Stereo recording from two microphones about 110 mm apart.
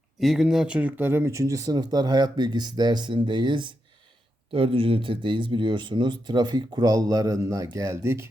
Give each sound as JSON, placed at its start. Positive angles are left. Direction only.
{"t": 0.2, "sound": "speech", "side_deg": -5}